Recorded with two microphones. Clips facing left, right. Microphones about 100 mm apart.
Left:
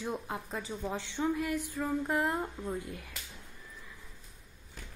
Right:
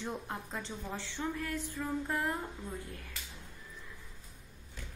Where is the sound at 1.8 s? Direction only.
25° left (ahead or behind).